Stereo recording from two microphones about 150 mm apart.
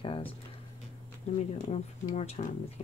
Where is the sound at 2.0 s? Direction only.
45° left (ahead or behind).